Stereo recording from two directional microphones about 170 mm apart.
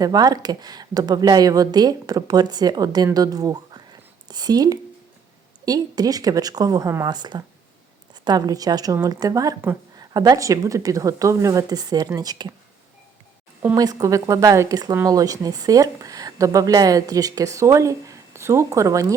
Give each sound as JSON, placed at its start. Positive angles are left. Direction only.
{"t": 0.0, "sound": "speech", "side_deg": -20}
{"t": 13.6, "sound": "speech", "side_deg": -20}